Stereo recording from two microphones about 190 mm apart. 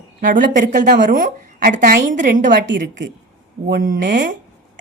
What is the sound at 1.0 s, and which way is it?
A woman's voice, 45° right (ahead or behind).